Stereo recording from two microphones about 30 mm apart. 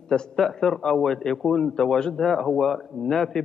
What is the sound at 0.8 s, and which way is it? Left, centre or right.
A man's voice, left.